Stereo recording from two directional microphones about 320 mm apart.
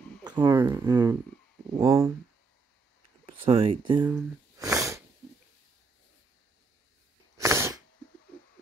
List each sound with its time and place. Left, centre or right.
0.2 s speech: centre
3.3 s speech: centre
4.1 s snort: centre
7.3 s sneeze: centre